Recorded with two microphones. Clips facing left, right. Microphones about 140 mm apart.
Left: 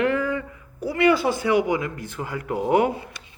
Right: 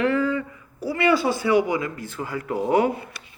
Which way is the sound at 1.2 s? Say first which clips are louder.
Even; 50° left (ahead or behind).